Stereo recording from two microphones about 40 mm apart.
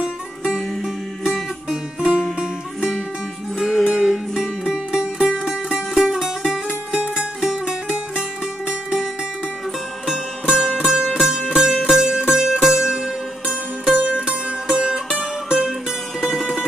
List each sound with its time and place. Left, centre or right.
0.0 s music: right
1.7 s music: centre
3.5 s music: centre
10.5 s music: centre
13.9 s music: right; by 15.7 s centre